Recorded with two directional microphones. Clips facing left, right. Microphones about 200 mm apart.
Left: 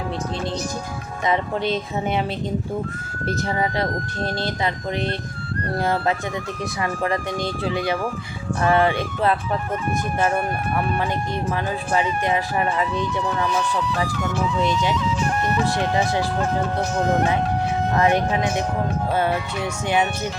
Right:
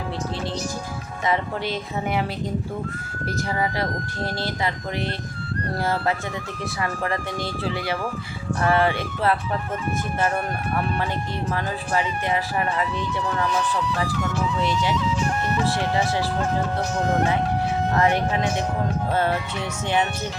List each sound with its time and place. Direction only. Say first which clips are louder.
1.3 s speech: left 3 dB; 20° left (ahead or behind)
3.2 s speech: left 2 dB; 25° left (ahead or behind)
5.8 s speech: left 2 dB; 15° left (ahead or behind)
11.9 s speech: left 2 dB; 20° left (ahead or behind)
14.6 s speech: left 2 dB; 20° left (ahead or behind)
18.0 s speech: left 3 dB; 15° left (ahead or behind)